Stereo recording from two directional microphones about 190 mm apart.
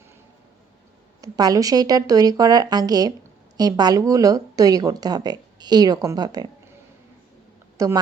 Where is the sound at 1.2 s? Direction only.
20° right (ahead or behind).